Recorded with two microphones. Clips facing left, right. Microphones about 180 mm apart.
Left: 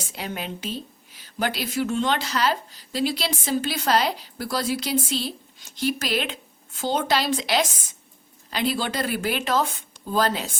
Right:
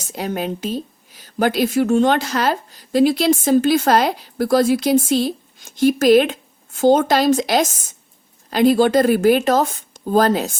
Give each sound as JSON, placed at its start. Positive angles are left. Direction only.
{"t": 0.0, "sound": "speech", "side_deg": -45}